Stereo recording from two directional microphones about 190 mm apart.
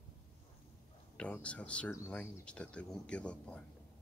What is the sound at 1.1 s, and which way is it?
Speech, 5° left (ahead or behind).